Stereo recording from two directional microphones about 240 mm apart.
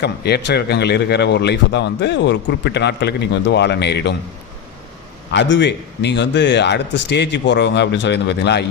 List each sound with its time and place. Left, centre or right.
0.0 s a man's voice: left
5.3 s a man's voice: left